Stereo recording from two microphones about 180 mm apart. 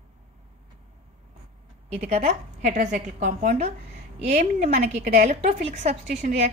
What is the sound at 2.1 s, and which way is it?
A woman's voice, 40° right (ahead or behind).